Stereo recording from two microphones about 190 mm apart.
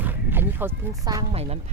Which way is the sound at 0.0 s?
10° right (ahead or behind).